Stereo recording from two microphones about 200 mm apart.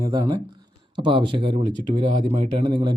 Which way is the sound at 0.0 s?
20° right (ahead or behind).